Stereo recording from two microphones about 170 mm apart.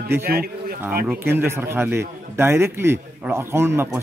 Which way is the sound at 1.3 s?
15° right (ahead or behind).